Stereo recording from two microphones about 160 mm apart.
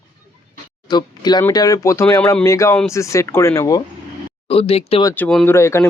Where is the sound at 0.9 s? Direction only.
25° left (ahead or behind).